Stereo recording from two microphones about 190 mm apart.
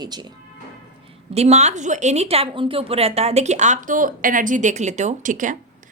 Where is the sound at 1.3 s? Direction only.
35° right (ahead or behind).